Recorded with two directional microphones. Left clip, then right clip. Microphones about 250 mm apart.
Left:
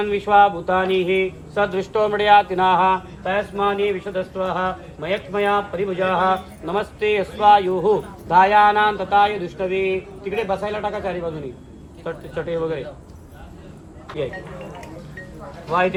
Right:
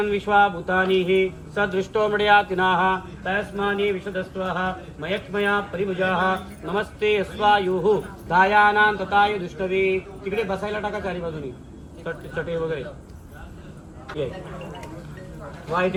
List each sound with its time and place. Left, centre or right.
0.0 s speech: left
15.7 s speech: left